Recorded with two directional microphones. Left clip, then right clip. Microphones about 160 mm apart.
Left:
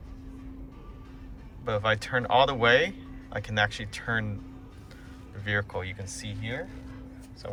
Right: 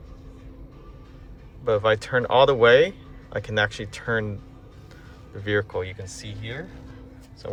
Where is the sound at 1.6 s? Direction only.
30° right (ahead or behind).